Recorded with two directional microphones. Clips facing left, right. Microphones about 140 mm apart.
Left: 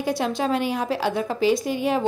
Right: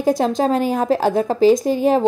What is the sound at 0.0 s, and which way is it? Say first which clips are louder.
A woman's voice: right 7 dB; 45° right (ahead or behind).